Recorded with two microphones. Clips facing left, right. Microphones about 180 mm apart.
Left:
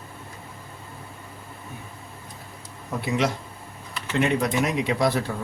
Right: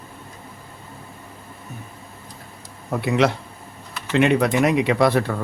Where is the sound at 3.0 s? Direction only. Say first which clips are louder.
Right 5 dB; 65° right (ahead or behind).